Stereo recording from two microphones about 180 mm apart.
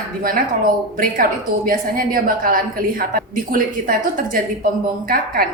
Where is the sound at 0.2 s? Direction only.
50° right (ahead or behind).